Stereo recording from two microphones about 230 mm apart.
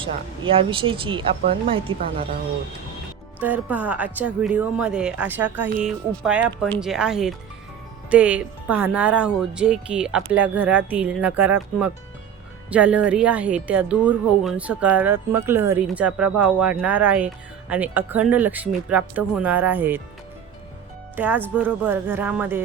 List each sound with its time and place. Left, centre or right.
0.0 s speech: right
3.4 s a woman's voice: centre
21.2 s speech: centre